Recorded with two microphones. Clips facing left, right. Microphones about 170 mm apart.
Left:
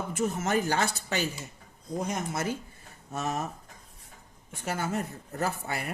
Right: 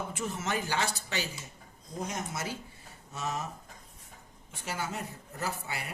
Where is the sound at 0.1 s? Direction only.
45° left (ahead or behind).